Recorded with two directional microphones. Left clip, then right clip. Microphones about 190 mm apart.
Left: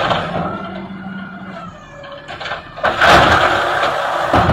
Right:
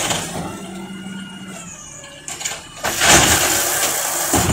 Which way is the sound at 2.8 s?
30° right (ahead or behind).